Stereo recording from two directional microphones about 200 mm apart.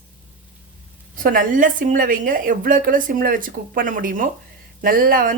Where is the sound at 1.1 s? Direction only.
45° right (ahead or behind).